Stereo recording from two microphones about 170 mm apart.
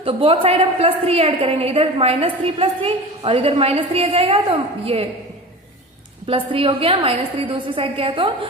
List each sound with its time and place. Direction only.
0.0 s a woman's voice: 35° right (ahead or behind)
6.2 s a woman's voice: 30° right (ahead or behind)